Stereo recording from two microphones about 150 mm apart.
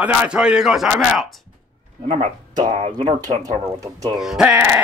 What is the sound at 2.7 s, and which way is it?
Speech, 40° right (ahead or behind).